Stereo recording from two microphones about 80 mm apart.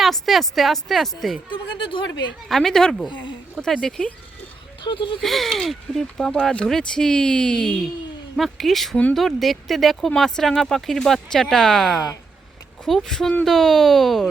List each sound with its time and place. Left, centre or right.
0.0 s speech: centre
1.5 s speech: left
2.5 s speech: centre
4.8 s speech: left
5.2 s speech: centre